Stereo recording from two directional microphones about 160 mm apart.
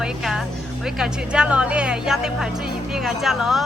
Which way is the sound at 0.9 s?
5° right (ahead or behind).